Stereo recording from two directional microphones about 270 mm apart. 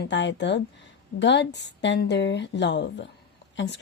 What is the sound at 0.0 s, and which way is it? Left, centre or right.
Speech, left.